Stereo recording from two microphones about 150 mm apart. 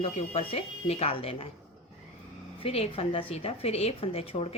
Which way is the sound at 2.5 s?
40° left (ahead or behind).